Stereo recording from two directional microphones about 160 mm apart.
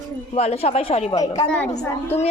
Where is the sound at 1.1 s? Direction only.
25° left (ahead or behind).